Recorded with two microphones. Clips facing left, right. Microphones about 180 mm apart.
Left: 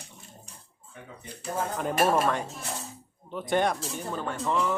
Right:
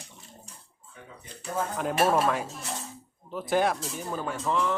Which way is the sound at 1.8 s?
Centre (ahead or behind).